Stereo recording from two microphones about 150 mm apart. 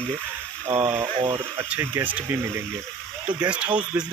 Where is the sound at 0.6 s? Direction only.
15° right (ahead or behind).